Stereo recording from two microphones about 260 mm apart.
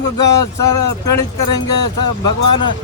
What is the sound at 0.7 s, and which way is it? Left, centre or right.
Speech, left.